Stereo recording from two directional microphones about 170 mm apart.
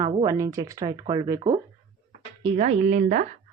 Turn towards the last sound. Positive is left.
turn(degrees=-45)  # may be behind; listen again after turning